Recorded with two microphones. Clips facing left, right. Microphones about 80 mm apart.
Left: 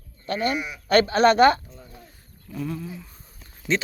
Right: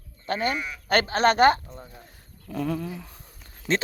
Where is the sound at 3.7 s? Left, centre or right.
Right.